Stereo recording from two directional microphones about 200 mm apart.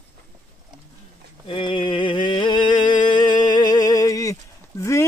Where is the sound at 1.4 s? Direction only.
25° left (ahead or behind).